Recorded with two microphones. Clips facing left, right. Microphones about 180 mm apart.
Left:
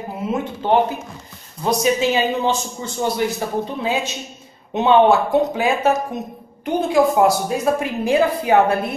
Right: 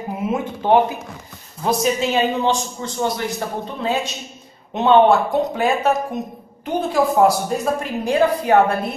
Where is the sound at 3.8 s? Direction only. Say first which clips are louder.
Right 3 dB; 5° left (ahead or behind).